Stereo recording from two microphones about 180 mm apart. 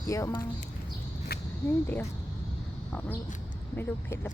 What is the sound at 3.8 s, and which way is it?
Speech, 10° left (ahead or behind).